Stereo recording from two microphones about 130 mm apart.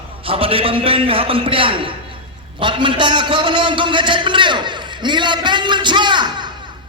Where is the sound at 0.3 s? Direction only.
45° right (ahead or behind).